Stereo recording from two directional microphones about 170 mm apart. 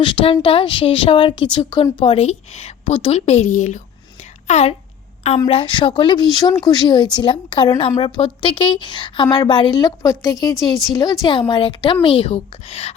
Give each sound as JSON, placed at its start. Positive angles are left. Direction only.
{"t": 0.0, "sound": "a woman's voice", "side_deg": 30}
{"t": 5.5, "sound": "a woman's voice", "side_deg": 30}